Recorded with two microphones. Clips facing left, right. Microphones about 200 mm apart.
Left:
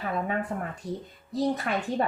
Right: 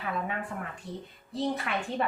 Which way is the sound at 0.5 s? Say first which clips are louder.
Left 5 dB; 45° left (ahead or behind).